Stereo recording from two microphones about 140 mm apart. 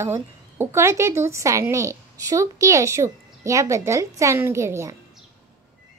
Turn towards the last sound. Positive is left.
turn(degrees=-20)  # may be behind; listen again after turning